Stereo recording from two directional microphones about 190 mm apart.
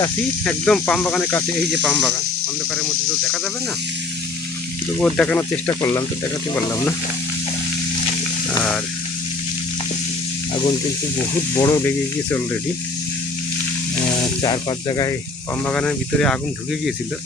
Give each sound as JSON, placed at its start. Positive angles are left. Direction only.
{"t": 0.4, "sound": "speech", "side_deg": 5}
{"t": 4.9, "sound": "speech", "side_deg": 5}
{"t": 11.5, "sound": "speech", "side_deg": 20}
{"t": 14.4, "sound": "speech", "side_deg": 25}
{"t": 15.6, "sound": "speech", "side_deg": 5}